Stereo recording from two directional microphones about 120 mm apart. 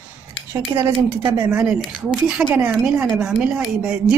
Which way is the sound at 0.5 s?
25° right (ahead or behind).